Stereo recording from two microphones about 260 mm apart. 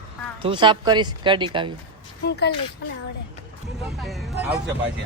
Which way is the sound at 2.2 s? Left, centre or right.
Left.